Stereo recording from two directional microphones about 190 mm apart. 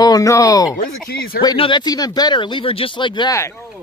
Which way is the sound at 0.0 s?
20° left (ahead or behind).